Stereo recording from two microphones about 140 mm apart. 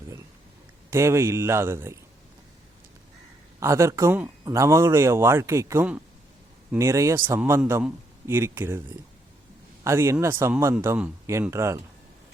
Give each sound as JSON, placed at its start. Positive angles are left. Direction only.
{"t": 0.9, "sound": "speech", "side_deg": -20}
{"t": 3.6, "sound": "speech", "side_deg": -20}
{"t": 9.8, "sound": "speech", "side_deg": -20}